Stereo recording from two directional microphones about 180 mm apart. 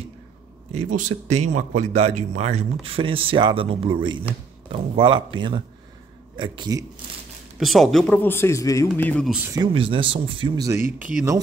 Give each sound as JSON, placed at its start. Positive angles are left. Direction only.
{"t": 0.7, "sound": "speech", "side_deg": -45}
{"t": 7.5, "sound": "a man's voice", "side_deg": 0}
{"t": 9.8, "sound": "speech", "side_deg": -30}